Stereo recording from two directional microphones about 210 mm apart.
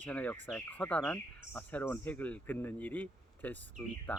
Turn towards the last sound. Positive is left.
turn(degrees=10)  # may be behind; listen again after turning